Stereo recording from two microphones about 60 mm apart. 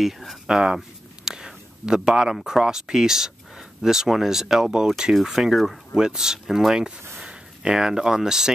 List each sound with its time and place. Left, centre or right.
0.0 s speech: centre